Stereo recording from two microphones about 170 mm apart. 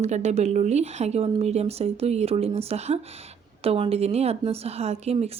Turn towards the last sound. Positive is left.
turn(degrees=-40)  # may be behind; listen again after turning